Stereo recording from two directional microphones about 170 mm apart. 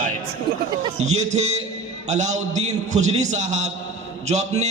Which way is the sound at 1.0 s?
40° right (ahead or behind).